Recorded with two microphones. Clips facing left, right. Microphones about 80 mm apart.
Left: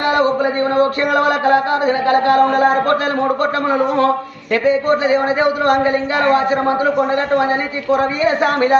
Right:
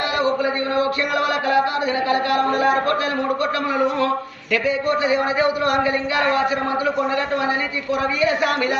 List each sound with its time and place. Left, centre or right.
0.2 s chant: left
7.9 s chant: left